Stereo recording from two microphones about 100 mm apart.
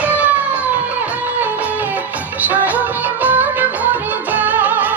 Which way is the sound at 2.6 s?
15° right (ahead or behind).